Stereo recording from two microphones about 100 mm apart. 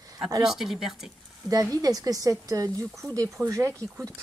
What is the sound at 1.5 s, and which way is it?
Speech, 40° right (ahead or behind).